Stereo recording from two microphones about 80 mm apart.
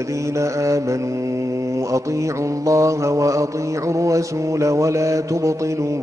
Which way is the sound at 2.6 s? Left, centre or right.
Right.